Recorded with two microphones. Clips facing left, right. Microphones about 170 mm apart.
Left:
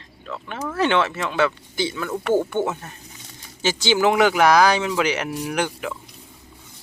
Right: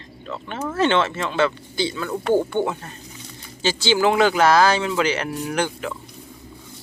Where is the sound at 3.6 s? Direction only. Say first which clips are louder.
Even; 20° left (ahead or behind).